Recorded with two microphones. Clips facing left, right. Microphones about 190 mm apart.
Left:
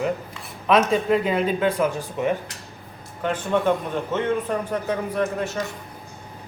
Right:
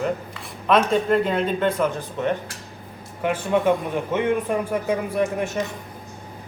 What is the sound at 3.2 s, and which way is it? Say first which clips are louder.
A man's voice: right 1 dB; 10° right (ahead or behind).